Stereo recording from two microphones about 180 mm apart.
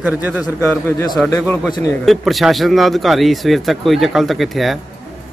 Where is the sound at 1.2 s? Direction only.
15° left (ahead or behind).